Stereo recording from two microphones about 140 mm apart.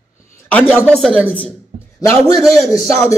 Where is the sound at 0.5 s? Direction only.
15° left (ahead or behind).